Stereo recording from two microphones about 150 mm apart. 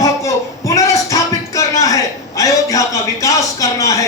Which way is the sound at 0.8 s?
20° left (ahead or behind).